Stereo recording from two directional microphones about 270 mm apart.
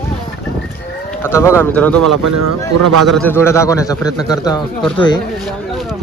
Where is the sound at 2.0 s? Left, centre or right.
Right.